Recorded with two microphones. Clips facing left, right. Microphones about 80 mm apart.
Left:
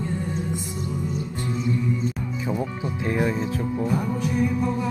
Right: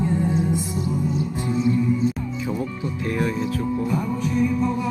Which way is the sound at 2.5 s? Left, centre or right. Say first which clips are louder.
Left 1 dB; centre.